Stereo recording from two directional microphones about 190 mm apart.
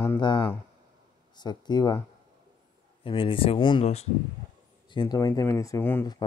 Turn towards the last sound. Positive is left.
turn(degrees=10)  # may be behind; listen again after turning